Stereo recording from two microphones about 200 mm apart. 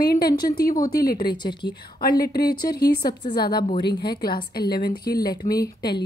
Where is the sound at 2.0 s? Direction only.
50° left (ahead or behind).